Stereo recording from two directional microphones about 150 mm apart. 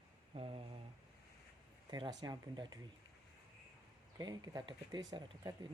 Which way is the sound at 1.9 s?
25° right (ahead or behind).